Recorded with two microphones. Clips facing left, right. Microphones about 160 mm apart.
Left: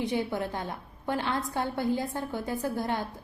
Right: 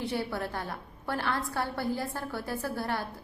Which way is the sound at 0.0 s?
20° left (ahead or behind).